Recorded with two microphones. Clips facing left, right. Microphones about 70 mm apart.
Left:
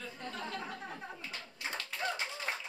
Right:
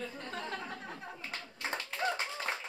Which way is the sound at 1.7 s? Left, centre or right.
Right.